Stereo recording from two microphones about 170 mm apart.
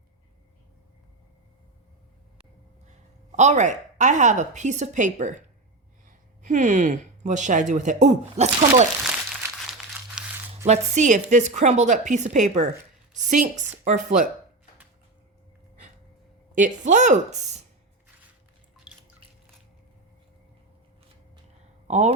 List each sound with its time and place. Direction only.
3.3 s a woman's voice: 45° right (ahead or behind)
9.0 s crumpling: centre (ahead or behind)
10.7 s a woman's voice: 45° right (ahead or behind)
16.6 s a woman's voice: 50° right (ahead or behind)
18.9 s drip: 5° right (ahead or behind)
21.8 s speech: 40° right (ahead or behind)